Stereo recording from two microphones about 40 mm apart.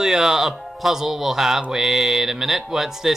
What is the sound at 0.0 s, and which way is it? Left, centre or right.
Speech, centre.